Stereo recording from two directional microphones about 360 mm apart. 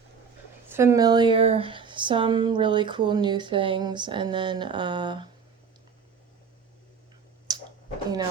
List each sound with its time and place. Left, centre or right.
0.7 s speech: centre